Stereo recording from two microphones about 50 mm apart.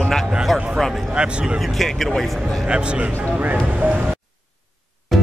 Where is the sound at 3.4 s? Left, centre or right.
Right.